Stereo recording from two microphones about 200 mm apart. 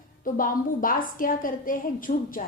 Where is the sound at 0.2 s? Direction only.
45° left (ahead or behind).